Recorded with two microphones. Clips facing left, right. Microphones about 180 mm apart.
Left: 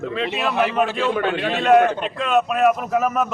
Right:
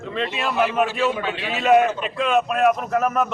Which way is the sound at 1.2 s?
55° left (ahead or behind).